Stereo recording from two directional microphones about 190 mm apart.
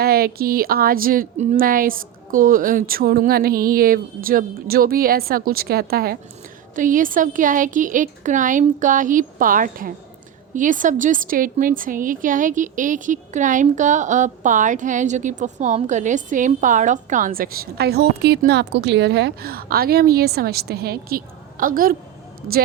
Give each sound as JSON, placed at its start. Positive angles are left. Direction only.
{"t": 0.0, "sound": "a woman's voice", "side_deg": -55}